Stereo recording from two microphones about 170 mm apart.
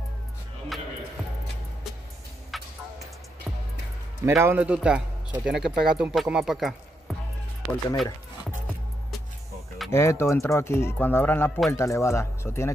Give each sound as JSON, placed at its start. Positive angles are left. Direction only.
{"t": 0.7, "sound": "music", "side_deg": 0}
{"t": 2.5, "sound": "music", "side_deg": 0}
{"t": 4.3, "sound": "speech", "side_deg": -15}
{"t": 9.9, "sound": "speech", "side_deg": 15}